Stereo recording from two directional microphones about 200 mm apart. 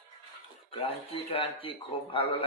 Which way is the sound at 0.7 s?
25° left (ahead or behind).